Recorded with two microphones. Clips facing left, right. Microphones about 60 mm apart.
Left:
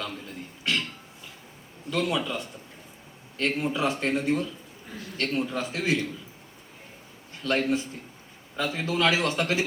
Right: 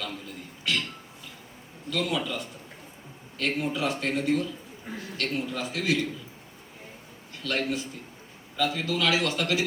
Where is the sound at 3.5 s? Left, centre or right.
Left.